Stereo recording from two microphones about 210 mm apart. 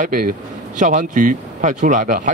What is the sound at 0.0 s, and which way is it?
Speech, 40° right (ahead or behind).